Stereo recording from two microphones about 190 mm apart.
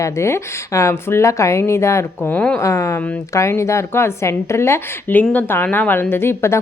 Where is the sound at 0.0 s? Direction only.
15° left (ahead or behind).